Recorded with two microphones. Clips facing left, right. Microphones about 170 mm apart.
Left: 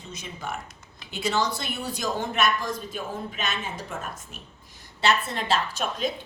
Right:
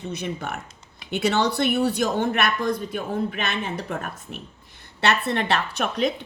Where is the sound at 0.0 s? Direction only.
60° right (ahead or behind).